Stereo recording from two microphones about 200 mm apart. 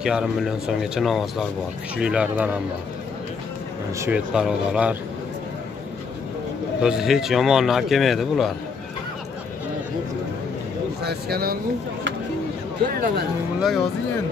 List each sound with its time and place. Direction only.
0.0 s speech: centre (ahead or behind)
4.0 s speech: 5° right (ahead or behind)
6.8 s speech: 5° right (ahead or behind)
11.0 s speech: 55° right (ahead or behind)
13.6 s speech: centre (ahead or behind)